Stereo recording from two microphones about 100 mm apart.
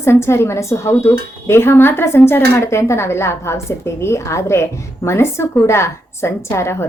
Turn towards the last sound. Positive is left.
turn(degrees=25)  # may be behind; listen again after turning